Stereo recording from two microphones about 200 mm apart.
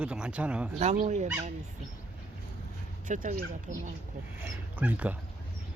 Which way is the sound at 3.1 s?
40° right (ahead or behind).